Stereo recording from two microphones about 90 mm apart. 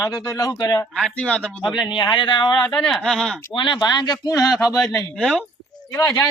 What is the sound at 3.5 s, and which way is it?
Speech, 60° left (ahead or behind).